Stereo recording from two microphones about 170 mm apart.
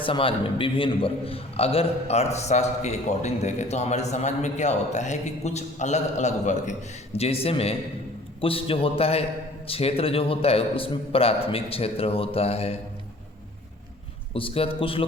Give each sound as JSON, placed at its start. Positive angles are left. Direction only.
{"t": 0.0, "sound": "a man's voice", "side_deg": 30}
{"t": 14.3, "sound": "a man's voice", "side_deg": 35}